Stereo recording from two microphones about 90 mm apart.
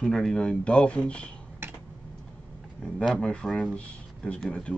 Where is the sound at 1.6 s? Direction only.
25° right (ahead or behind).